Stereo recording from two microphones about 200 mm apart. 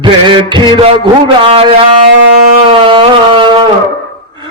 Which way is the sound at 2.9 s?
25° right (ahead or behind).